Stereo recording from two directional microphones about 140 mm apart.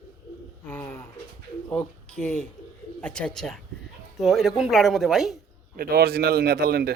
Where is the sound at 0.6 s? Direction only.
15° left (ahead or behind); by 5.3 s centre (ahead or behind).